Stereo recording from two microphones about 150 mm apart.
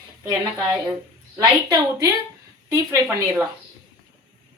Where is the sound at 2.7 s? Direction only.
20° right (ahead or behind).